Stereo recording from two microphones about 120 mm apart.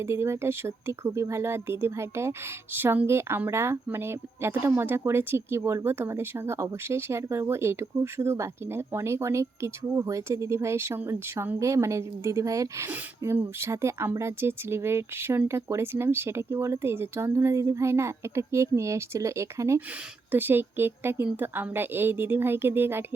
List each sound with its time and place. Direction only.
0.0 s speech: 20° right (ahead or behind)